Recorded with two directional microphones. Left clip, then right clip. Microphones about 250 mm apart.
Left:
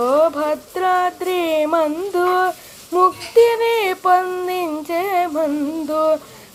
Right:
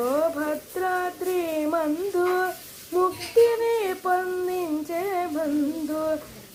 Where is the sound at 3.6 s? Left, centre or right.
Left.